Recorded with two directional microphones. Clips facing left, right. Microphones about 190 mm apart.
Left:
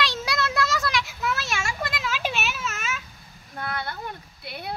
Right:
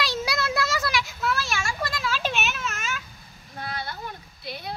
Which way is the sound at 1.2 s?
20° left (ahead or behind).